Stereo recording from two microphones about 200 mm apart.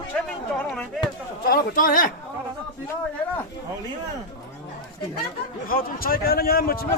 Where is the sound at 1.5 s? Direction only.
45° left (ahead or behind).